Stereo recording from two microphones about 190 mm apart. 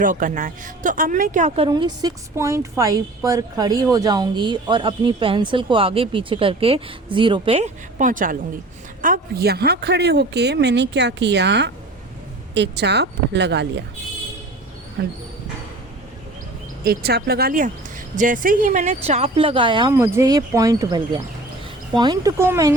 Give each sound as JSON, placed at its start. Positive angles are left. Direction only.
{"t": 0.0, "sound": "a woman's voice", "side_deg": -45}
{"t": 16.8, "sound": "speech", "side_deg": -55}